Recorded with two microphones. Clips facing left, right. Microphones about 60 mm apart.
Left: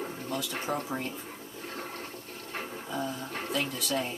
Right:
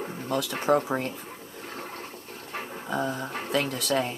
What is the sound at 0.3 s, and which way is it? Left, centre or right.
Speech, right.